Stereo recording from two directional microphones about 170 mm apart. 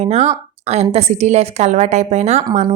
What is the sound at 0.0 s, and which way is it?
Speech, 40° right (ahead or behind).